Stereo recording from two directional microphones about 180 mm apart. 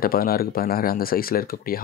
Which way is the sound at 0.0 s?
55° left (ahead or behind).